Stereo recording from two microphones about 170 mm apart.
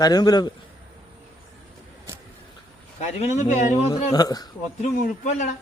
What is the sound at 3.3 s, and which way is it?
Speech, 45° left (ahead or behind).